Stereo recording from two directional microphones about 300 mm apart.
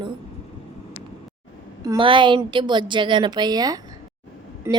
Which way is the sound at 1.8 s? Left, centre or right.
Centre.